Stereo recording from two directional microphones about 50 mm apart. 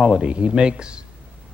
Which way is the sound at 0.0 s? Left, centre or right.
Centre.